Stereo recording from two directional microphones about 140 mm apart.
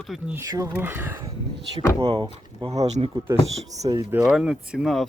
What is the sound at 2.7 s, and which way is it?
Speech, 50° right (ahead or behind).